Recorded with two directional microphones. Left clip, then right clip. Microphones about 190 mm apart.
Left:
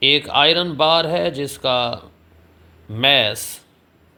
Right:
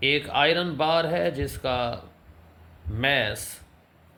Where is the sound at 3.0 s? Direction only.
30° left (ahead or behind).